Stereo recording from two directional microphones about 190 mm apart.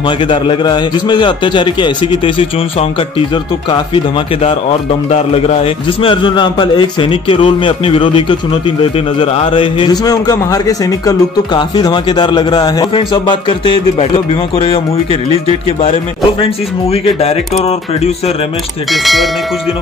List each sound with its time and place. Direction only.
0.3 s a man's voice: 25° left (ahead or behind)
16.9 s speech: 30° left (ahead or behind)
18.9 s speech: centre (ahead or behind)